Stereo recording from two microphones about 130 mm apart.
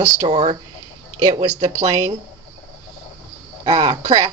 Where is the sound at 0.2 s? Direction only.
50° right (ahead or behind).